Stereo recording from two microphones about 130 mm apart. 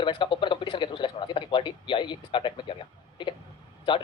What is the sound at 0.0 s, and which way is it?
A man's voice, 40° left (ahead or behind).